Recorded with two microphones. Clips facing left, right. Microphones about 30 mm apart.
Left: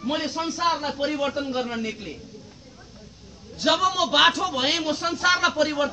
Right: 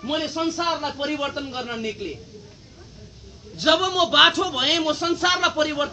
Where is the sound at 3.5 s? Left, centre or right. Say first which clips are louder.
Right 2 dB; right.